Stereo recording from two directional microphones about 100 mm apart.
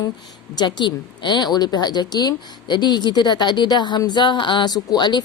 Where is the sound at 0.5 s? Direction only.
45° left (ahead or behind).